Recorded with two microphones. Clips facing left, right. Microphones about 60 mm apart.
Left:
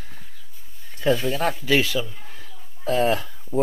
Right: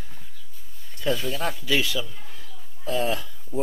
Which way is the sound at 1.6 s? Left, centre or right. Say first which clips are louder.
Left 3 dB; left.